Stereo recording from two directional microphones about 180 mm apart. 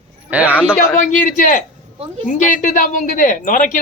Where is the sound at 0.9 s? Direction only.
45° left (ahead or behind).